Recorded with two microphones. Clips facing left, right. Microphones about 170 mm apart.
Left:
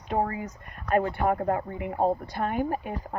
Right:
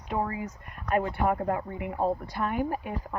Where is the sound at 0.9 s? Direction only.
40° left (ahead or behind).